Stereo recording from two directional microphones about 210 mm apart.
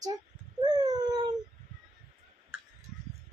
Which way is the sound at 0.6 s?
20° right (ahead or behind).